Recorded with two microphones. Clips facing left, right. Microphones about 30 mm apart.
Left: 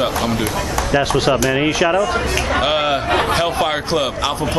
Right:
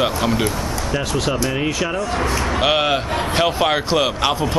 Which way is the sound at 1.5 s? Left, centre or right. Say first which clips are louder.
Left 5 dB; left.